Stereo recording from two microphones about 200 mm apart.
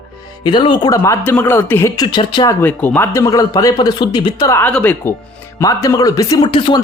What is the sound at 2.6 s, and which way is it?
A man's voice, 10° left (ahead or behind).